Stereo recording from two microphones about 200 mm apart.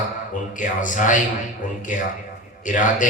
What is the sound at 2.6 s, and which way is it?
Speech, 40° left (ahead or behind).